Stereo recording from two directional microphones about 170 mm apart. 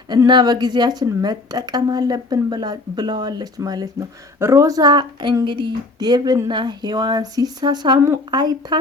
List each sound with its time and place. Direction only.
0.1 s a woman's voice: 25° right (ahead or behind)